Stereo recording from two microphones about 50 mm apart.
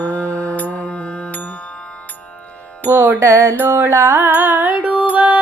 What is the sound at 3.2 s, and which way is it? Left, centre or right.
Music, right.